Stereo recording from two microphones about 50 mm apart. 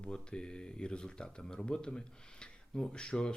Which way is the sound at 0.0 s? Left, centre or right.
Centre.